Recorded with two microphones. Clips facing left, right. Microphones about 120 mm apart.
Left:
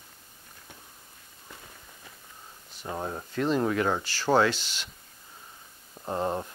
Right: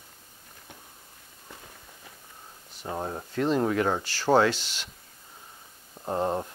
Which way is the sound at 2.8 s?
25° right (ahead or behind).